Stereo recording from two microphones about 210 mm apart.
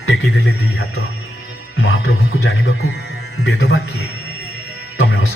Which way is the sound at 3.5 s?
90° left.